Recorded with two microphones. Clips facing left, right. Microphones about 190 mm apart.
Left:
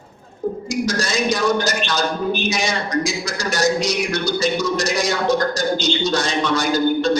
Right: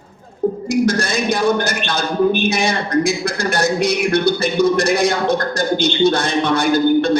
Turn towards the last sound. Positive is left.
turn(degrees=-60)  # may be behind; listen again after turning